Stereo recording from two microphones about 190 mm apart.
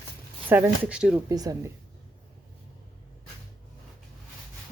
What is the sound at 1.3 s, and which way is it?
Speech, 20° right (ahead or behind).